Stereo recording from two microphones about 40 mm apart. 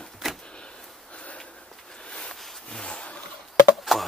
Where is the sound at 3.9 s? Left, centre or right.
Centre.